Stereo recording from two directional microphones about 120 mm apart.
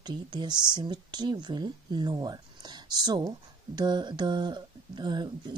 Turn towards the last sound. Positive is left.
turn(degrees=-40)  # may be behind; listen again after turning